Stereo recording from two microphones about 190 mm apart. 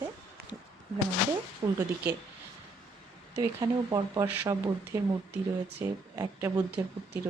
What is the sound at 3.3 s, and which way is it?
Speech, 20° right (ahead or behind).